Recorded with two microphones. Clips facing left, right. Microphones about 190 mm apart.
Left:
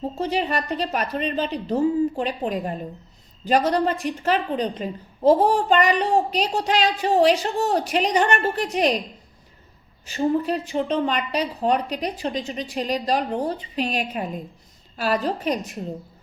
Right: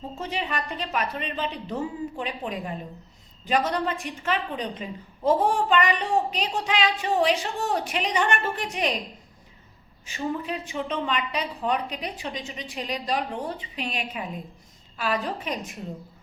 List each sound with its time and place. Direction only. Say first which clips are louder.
0.2 s a woman's voice: left 6 dB; 40° left (ahead or behind)
10.1 s a woman's voice: left 8 dB; 40° left (ahead or behind)